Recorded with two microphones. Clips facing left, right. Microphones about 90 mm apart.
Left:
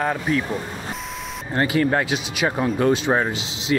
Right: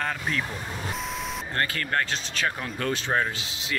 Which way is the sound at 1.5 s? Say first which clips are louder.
Left 8 dB; 15° left (ahead or behind).